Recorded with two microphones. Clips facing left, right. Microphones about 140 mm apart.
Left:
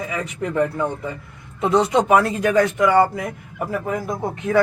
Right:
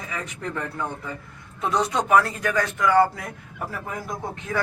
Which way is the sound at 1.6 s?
25° left (ahead or behind).